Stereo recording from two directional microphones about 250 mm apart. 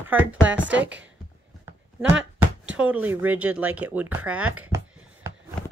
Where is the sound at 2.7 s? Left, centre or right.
Centre.